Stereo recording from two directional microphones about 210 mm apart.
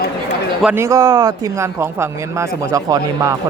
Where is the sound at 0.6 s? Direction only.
10° right (ahead or behind).